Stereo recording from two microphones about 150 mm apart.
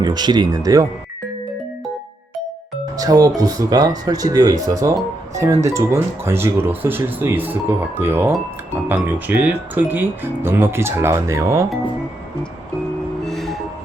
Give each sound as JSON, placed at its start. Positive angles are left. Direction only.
{"t": 0.0, "sound": "speech", "side_deg": -25}
{"t": 3.0, "sound": "speech", "side_deg": -25}
{"t": 13.2, "sound": "music", "side_deg": 0}